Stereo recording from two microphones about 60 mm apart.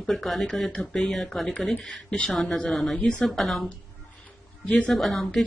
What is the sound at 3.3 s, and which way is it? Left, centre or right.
Speech, centre.